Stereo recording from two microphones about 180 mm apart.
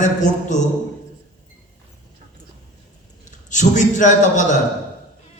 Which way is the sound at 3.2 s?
45° left (ahead or behind).